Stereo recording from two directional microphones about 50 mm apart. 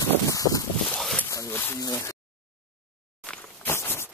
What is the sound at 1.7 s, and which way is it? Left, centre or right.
Speech, left.